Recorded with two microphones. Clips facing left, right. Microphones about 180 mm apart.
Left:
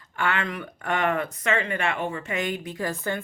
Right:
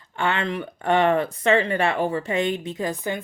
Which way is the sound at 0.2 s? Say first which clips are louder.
Right 3 dB; 25° right (ahead or behind).